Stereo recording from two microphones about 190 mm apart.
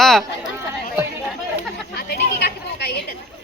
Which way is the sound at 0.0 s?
Centre (ahead or behind).